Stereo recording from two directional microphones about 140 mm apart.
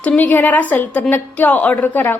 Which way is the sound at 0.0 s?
10° left (ahead or behind).